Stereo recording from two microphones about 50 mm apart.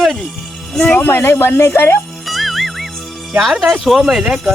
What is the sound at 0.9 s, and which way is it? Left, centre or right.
Speech, left.